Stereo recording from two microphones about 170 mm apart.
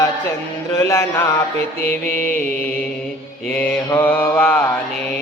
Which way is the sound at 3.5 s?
10° left (ahead or behind).